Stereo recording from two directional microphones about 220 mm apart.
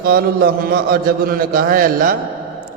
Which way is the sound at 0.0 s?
45° right (ahead or behind).